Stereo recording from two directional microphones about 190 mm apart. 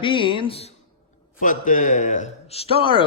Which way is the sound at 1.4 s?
45° left (ahead or behind).